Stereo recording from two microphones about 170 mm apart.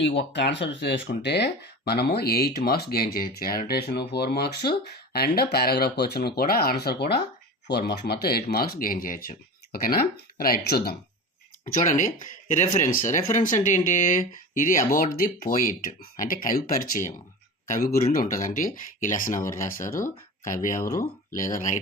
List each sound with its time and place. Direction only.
0.0 s speech: 90° left; by 10.9 s 65° left (ahead or behind)
11.6 s speech: 45° left (ahead or behind)
20.8 s speech: 15° left (ahead or behind)